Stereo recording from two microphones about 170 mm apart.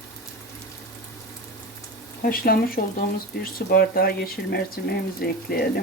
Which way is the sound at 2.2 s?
60° left (ahead or behind).